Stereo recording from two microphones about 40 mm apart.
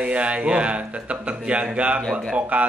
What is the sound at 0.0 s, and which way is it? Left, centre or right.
A man's voice, right.